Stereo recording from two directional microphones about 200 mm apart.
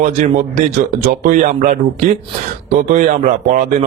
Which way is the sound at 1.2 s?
40° right (ahead or behind).